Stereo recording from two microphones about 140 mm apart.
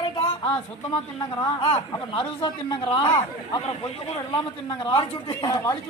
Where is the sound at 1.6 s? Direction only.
40° left (ahead or behind).